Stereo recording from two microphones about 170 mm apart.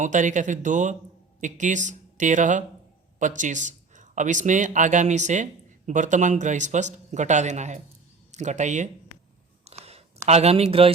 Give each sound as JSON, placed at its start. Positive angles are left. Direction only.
{"t": 0.0, "sound": "speech", "side_deg": -45}
{"t": 9.6, "sound": "a sound", "side_deg": -35}
{"t": 10.2, "sound": "speech", "side_deg": -40}